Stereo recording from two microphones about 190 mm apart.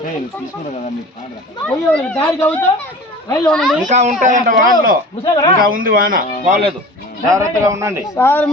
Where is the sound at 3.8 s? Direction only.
40° right (ahead or behind).